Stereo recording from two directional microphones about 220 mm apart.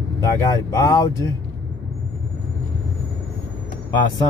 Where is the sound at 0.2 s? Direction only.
15° left (ahead or behind).